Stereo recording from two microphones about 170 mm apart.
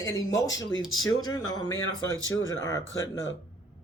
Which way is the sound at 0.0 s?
20° left (ahead or behind).